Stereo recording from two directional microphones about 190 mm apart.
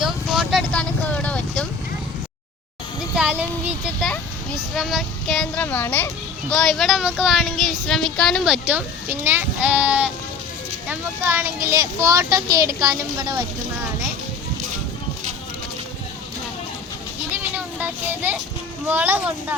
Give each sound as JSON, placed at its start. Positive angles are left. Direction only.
{"t": 0.0, "sound": "vehicle", "side_deg": 0}
{"t": 3.2, "sound": "a sound", "side_deg": -5}
{"t": 6.5, "sound": "speech", "side_deg": 5}
{"t": 17.7, "sound": "a child's voice", "side_deg": -10}